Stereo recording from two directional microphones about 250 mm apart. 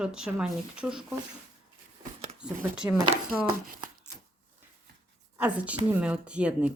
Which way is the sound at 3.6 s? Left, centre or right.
Right.